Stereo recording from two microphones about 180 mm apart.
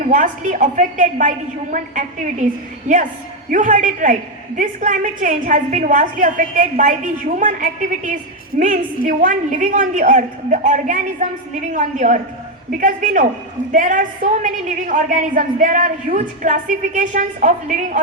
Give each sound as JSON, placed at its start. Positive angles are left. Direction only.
{"t": 0.0, "sound": "a woman's voice", "side_deg": -45}